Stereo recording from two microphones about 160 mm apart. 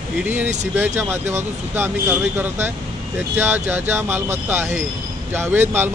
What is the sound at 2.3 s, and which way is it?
Speech, 15° right (ahead or behind).